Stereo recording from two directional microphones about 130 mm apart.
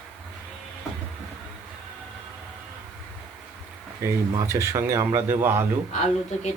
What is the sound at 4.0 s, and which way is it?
Speech, 25° right (ahead or behind).